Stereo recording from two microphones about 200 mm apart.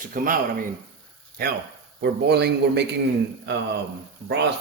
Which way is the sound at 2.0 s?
55° right (ahead or behind).